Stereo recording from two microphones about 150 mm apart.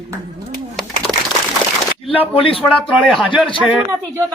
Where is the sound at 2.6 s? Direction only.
5° left (ahead or behind).